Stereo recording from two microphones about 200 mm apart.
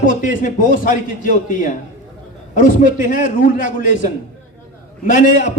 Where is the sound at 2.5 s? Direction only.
40° left (ahead or behind).